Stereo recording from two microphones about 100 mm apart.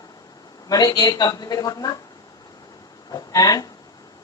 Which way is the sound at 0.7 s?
35° left (ahead or behind).